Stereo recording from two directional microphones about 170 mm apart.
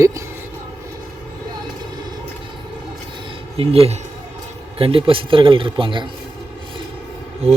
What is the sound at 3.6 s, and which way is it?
Speech, 35° right (ahead or behind).